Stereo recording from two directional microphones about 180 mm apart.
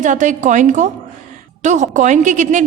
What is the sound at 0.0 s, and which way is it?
A woman's voice, 45° right (ahead or behind).